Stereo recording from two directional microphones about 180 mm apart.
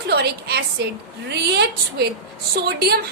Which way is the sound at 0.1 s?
65° right (ahead or behind).